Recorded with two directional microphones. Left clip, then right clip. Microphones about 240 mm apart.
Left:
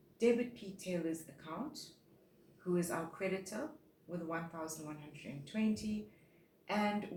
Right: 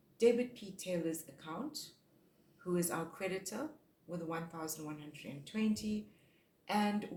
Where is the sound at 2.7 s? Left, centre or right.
Right.